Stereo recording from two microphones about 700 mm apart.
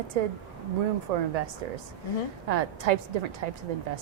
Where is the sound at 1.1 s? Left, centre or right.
Right.